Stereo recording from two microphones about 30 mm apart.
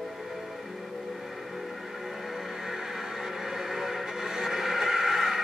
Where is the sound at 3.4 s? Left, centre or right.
Centre.